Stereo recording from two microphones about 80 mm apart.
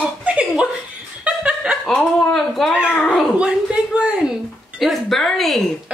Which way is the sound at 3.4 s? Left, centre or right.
Centre.